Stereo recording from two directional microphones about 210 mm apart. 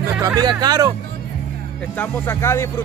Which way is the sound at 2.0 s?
10° left (ahead or behind).